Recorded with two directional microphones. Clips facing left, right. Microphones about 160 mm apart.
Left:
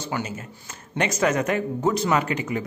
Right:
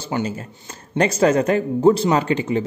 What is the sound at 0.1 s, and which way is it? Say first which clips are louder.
Speech: right 8 dB; 25° right (ahead or behind).